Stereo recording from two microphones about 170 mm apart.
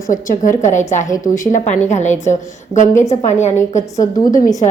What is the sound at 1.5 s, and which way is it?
Speech, 45° left (ahead or behind).